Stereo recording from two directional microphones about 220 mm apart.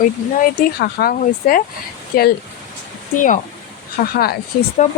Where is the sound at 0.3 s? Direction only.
45° left (ahead or behind).